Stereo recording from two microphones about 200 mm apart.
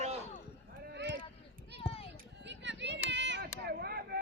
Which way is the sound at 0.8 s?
55° right (ahead or behind).